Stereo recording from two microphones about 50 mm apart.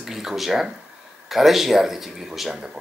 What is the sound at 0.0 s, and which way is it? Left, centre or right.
Speech, centre.